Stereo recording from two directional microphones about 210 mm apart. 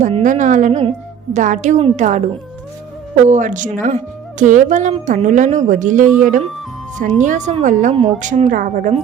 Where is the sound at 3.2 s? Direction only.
35° right (ahead or behind).